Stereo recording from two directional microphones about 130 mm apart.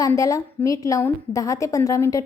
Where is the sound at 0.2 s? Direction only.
25° left (ahead or behind).